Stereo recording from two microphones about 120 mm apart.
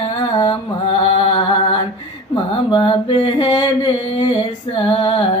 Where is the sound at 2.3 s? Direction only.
40° left (ahead or behind).